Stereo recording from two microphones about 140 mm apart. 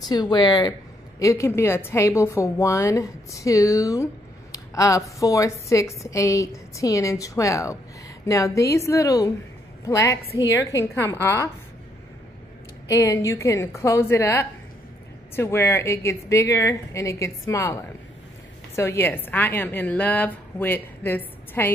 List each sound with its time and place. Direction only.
0.1 s a woman's voice: 30° left (ahead or behind)
12.8 s a woman's voice: 20° left (ahead or behind)
18.8 s a woman's voice: 15° left (ahead or behind)